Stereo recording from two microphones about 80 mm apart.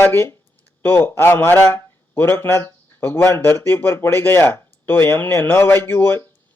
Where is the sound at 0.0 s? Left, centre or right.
Left.